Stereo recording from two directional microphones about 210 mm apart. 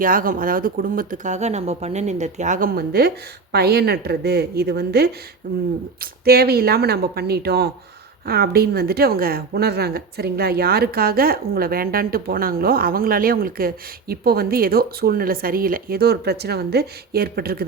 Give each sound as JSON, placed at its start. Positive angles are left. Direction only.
{"t": 0.0, "sound": "a woman's voice", "side_deg": -40}